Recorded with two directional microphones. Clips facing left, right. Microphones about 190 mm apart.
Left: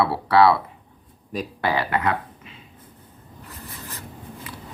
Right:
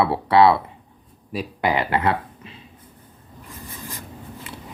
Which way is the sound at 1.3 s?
5° right (ahead or behind).